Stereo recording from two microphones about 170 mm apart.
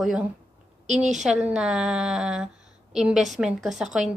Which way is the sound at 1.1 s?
5° right (ahead or behind).